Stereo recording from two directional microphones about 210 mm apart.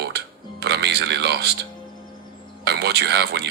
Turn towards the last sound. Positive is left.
turn(degrees=-50)  # may be behind; listen again after turning